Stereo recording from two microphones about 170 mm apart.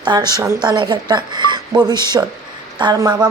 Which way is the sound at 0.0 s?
25° right (ahead or behind).